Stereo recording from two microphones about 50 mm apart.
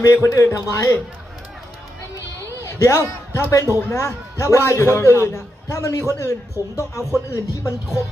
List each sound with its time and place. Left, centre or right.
0.0 s speech: left
2.6 s a sound: left
3.5 s a man's voice: left
6.6 s speech: right
7.3 s speech: left